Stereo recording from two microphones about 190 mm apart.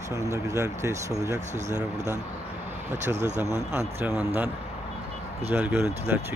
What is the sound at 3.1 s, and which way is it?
Speech, 35° right (ahead or behind).